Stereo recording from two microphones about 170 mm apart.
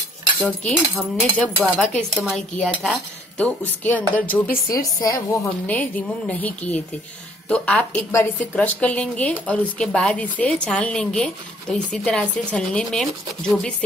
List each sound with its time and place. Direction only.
0.4 s a woman's voice: 5° left (ahead or behind)